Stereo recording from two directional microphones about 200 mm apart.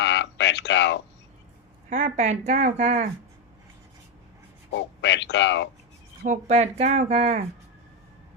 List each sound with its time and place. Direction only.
0.0 s a sound: 60° left (ahead or behind)
1.9 s speech: 40° right (ahead or behind)
4.7 s speech: 60° left (ahead or behind)
6.2 s speech: 35° right (ahead or behind)